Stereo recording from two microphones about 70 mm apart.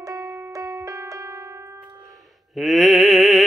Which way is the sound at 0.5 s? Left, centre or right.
Right.